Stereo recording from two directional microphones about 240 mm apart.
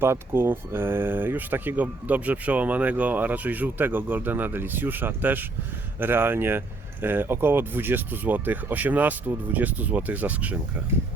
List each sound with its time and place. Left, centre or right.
0.0 s speech: centre